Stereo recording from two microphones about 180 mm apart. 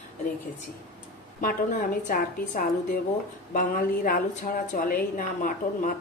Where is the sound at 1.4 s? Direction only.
50° left (ahead or behind).